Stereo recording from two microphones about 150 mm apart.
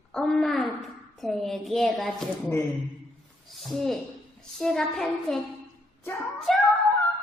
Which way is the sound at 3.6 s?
Centre (ahead or behind).